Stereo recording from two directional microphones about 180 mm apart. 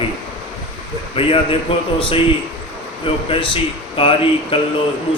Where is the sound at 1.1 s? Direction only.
30° left (ahead or behind).